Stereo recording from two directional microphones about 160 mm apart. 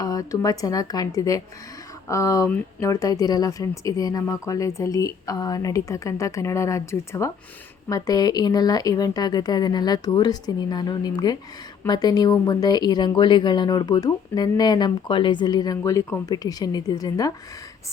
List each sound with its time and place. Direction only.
0.0 s speech: 20° left (ahead or behind)